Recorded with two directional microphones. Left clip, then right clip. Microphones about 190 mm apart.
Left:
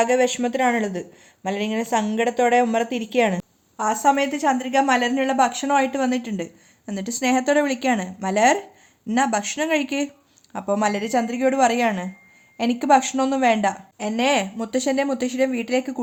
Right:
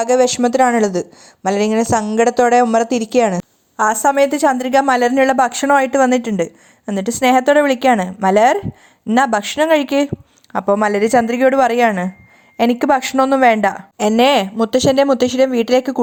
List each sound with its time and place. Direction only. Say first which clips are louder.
0.0 s speech: right 6 dB; 25° right (ahead or behind)
3.8 s a woman's voice: right 6 dB; 45° right (ahead or behind)